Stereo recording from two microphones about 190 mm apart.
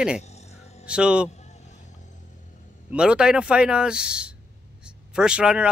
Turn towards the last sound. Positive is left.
turn(degrees=-5)  # may be behind; listen again after turning